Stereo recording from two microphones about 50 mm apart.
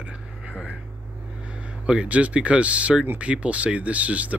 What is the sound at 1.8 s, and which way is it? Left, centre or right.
Speech, right.